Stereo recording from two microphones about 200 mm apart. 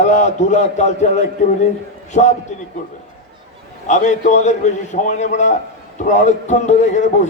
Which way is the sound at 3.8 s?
40° left (ahead or behind).